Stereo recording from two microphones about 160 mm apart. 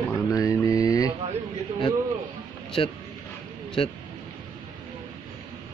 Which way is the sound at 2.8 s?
35° left (ahead or behind).